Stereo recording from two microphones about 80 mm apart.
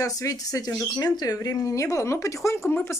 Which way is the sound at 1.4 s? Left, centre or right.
Left.